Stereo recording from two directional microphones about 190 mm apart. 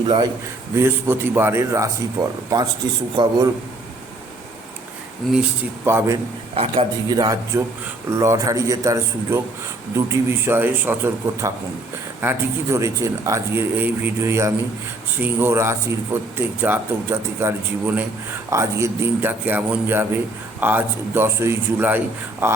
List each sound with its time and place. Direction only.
0.8 s a man's voice: 10° right (ahead or behind)
5.8 s speech: 15° right (ahead or behind)
6.5 s a man's voice: 30° right (ahead or behind); by 22.5 s 10° right (ahead or behind)